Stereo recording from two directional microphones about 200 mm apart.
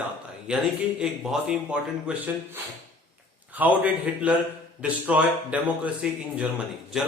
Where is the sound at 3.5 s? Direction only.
10° right (ahead or behind).